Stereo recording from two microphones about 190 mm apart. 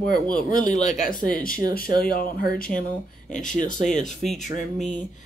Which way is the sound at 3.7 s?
40° left (ahead or behind).